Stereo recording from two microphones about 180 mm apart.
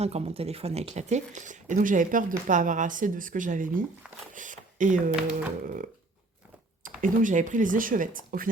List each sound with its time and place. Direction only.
0.0 s speech: 35° right (ahead or behind)
5.1 s speech: 5° right (ahead or behind)
5.6 s speech: 50° right (ahead or behind)
7.0 s speech: 45° right (ahead or behind)